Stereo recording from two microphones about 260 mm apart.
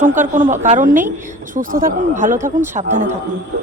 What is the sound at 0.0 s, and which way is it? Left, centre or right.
Speech, right.